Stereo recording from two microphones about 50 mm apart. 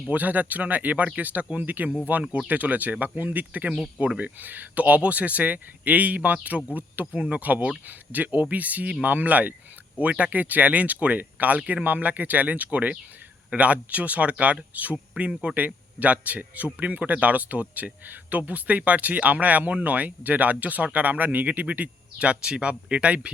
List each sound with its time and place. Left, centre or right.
0.1 s speech: right